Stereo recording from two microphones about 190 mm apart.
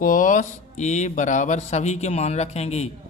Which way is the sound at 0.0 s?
45° left (ahead or behind).